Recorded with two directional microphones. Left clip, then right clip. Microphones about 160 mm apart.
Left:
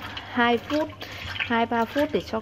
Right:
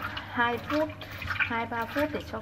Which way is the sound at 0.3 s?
50° left (ahead or behind).